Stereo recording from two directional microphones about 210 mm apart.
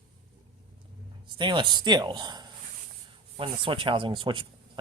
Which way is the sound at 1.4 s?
20° right (ahead or behind).